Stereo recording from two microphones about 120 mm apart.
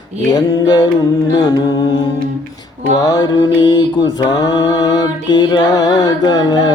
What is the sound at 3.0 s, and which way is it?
Mantra, 30° left (ahead or behind).